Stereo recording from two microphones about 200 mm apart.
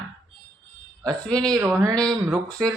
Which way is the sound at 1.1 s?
5° left (ahead or behind).